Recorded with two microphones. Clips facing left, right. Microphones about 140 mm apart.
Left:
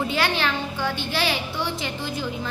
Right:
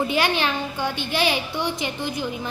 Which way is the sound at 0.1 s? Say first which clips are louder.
Right 2 dB; 15° right (ahead or behind).